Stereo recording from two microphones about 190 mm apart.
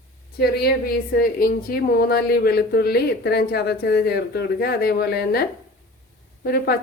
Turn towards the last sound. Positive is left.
turn(degrees=55)  # may be behind; listen again after turning